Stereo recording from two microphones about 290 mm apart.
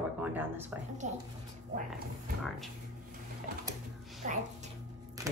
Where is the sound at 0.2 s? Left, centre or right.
Centre.